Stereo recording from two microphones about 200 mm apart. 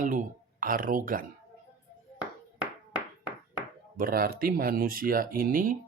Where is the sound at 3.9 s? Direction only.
45° right (ahead or behind).